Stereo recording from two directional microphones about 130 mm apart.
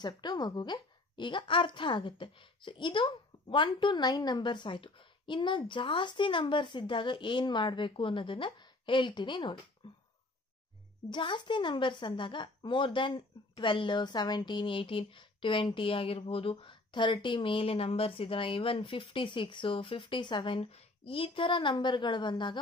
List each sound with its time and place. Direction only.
0.0 s a woman's voice: 35° left (ahead or behind)
9.8 s a sound: 40° left (ahead or behind)
11.1 s a woman's voice: 35° left (ahead or behind)